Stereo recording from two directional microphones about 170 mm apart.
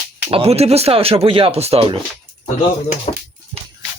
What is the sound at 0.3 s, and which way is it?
Speech, 35° right (ahead or behind).